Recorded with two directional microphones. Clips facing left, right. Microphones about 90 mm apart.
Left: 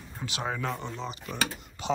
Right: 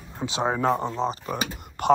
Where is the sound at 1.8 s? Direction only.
60° right (ahead or behind).